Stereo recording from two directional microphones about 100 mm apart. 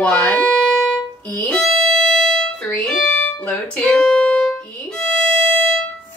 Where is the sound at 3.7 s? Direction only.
10° left (ahead or behind).